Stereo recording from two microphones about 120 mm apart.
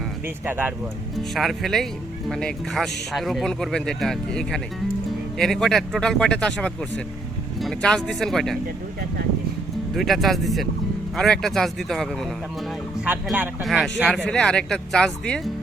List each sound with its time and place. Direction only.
0.4 s speech: 15° right (ahead or behind)
1.3 s a man's voice: centre (ahead or behind)
9.9 s a man's voice: centre (ahead or behind)
13.6 s a man's voice: centre (ahead or behind)